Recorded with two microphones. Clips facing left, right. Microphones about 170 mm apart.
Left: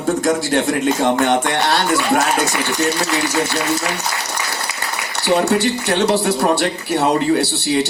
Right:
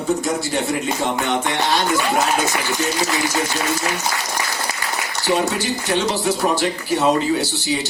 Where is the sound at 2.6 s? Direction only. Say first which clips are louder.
Left 2 dB; 65° left (ahead or behind).